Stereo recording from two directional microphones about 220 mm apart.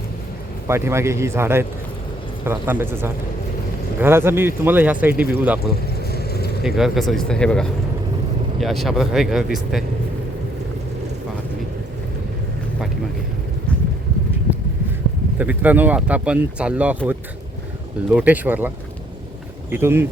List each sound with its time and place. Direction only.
0.7 s speech: 10° right (ahead or behind)
6.0 s vehicle: 45° left (ahead or behind)
6.6 s speech: centre (ahead or behind)
15.4 s speech: 5° right (ahead or behind)
18.1 s speech: 5° right (ahead or behind)
19.7 s speech: 10° right (ahead or behind)